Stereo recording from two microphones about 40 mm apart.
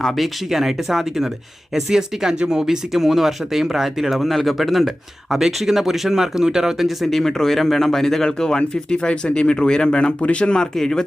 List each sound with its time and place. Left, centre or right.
0.0 s speech: centre
6.8 s speech: centre